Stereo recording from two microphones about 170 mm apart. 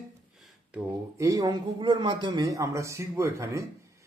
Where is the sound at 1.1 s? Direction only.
20° right (ahead or behind).